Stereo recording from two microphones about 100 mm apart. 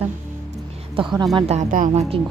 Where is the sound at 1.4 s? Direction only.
90° right.